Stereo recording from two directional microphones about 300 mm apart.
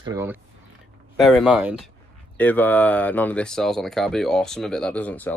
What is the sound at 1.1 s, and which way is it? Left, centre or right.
Speech, centre.